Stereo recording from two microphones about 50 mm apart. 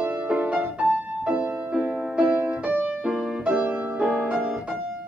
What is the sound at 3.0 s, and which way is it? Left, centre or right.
Music, centre.